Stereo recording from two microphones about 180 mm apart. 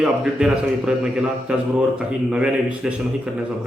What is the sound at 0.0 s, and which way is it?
A man's voice, 5° right (ahead or behind).